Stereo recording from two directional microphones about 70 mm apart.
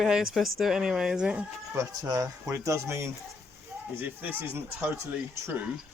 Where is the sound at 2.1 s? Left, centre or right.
Right.